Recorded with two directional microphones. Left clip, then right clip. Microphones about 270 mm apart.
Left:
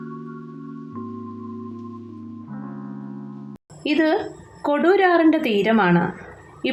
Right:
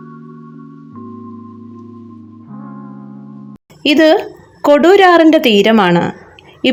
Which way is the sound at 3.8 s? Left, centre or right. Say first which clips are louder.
Right 10 dB; right.